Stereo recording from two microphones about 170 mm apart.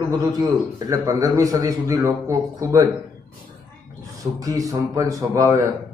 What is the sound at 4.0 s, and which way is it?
A man's voice, 20° right (ahead or behind).